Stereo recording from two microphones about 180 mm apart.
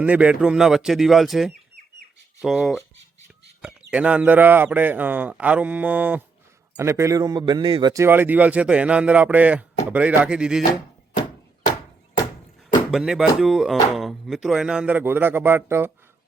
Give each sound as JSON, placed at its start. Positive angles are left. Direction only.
{"t": 0.0, "sound": "speech", "side_deg": -5}
{"t": 3.6, "sound": "chicken", "side_deg": -5}
{"t": 3.9, "sound": "a man's voice", "side_deg": -5}
{"t": 8.0, "sound": "speech", "side_deg": -10}
{"t": 12.9, "sound": "speech", "side_deg": 0}